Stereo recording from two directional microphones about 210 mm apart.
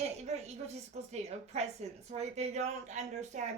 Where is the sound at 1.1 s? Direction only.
30° right (ahead or behind).